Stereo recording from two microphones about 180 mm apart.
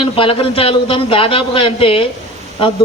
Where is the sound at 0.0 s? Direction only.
30° left (ahead or behind).